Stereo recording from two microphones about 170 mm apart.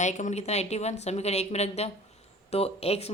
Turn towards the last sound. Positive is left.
turn(degrees=35)  # may be behind; listen again after turning